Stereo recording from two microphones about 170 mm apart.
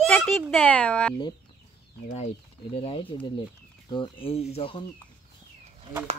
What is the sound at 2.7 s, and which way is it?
Speech, 35° left (ahead or behind).